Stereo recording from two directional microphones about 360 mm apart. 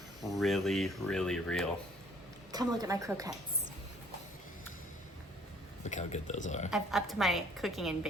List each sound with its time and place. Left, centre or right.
0.3 s speech: centre
2.5 s a woman's voice: centre
5.8 s speech: centre
6.7 s speech: centre